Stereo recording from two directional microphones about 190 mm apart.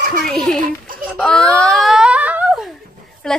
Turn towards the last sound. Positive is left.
turn(degrees=5)  # may be behind; listen again after turning